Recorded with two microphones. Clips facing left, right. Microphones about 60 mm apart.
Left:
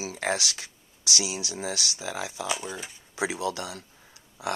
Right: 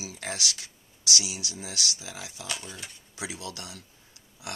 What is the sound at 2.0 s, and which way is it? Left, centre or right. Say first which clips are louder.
Speech: left 9 dB; left.